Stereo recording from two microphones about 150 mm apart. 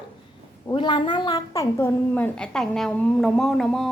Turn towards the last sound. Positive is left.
turn(degrees=0)  # may be behind; listen again after turning